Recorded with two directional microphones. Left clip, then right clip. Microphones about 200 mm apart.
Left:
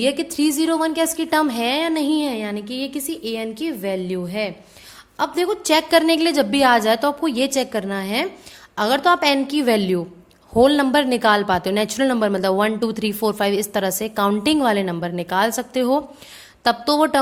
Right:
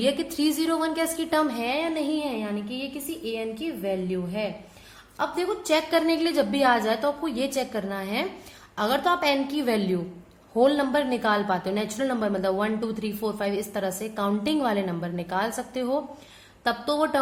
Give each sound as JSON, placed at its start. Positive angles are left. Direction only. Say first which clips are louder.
{"t": 0.0, "sound": "a woman's voice", "louder": "left 5 dB", "side_deg": 30}